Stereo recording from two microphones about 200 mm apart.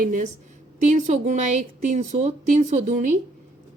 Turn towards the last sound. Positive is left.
turn(degrees=-40)  # may be behind; listen again after turning